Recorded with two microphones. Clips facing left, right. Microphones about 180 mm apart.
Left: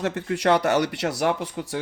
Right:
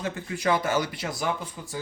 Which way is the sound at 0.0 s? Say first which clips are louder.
Left 5 dB; 75° left (ahead or behind).